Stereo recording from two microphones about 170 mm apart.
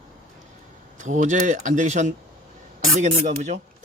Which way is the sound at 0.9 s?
45° right (ahead or behind).